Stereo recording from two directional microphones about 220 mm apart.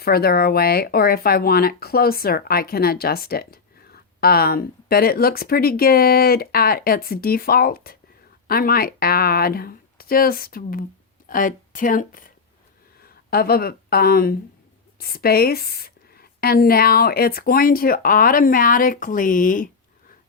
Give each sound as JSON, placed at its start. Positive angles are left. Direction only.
{"t": 0.0, "sound": "speech", "side_deg": 45}